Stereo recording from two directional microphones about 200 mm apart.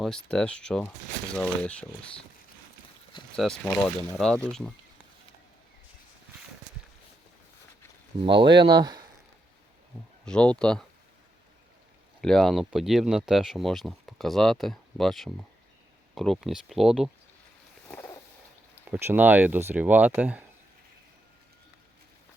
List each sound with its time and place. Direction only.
0.0 s speech: 5° left (ahead or behind)
3.3 s speech: 5° left (ahead or behind)
8.2 s speech: 25° right (ahead or behind)
10.2 s speech: 5° left (ahead or behind)
12.2 s speech: centre (ahead or behind)
17.8 s dog: 15° left (ahead or behind)
18.9 s speech: 10° right (ahead or behind)